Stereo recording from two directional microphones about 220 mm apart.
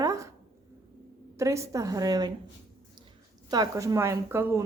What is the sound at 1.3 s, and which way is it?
Speech, 15° right (ahead or behind).